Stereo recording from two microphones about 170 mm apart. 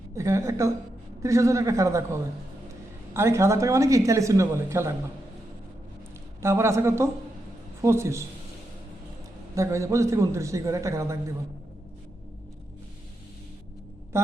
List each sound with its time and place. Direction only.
0.2 s speech: 15° right (ahead or behind)
6.4 s speech: 15° right (ahead or behind)
9.6 s speech: 20° right (ahead or behind)